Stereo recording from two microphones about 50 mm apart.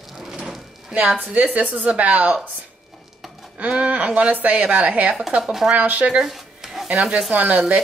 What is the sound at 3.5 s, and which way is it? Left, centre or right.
Speech, right.